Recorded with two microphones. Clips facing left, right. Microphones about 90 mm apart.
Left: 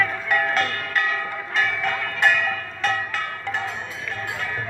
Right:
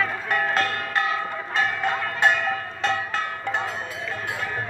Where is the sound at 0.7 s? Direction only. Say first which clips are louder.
Even; 25° right (ahead or behind).